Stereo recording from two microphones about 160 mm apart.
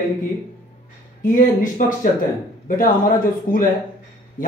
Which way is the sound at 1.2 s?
55° left (ahead or behind).